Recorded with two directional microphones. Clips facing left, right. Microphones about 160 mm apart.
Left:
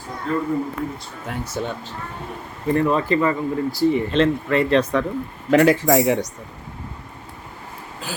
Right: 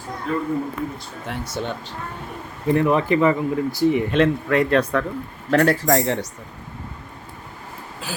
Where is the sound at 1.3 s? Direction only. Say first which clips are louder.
Left 1 dB; 5° left (ahead or behind).